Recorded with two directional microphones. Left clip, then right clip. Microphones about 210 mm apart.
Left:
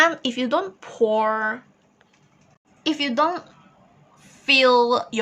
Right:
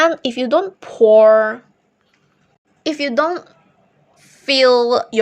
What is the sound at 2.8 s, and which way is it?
Speech, 25° right (ahead or behind).